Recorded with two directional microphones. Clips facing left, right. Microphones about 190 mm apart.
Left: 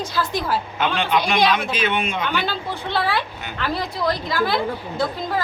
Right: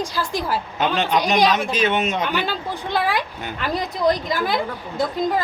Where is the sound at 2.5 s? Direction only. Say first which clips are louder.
Right 1 dB; 15° right (ahead or behind).